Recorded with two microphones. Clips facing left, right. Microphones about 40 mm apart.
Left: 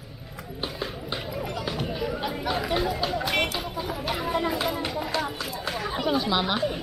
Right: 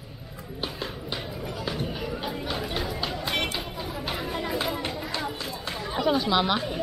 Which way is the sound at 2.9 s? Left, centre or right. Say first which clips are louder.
Left 4 dB; centre.